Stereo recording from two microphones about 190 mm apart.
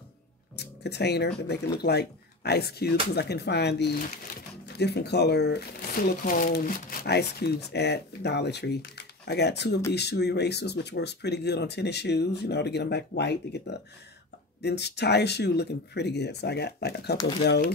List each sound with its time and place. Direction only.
0.6 s speech: 60° left (ahead or behind)
6.2 s speech: 45° left (ahead or behind)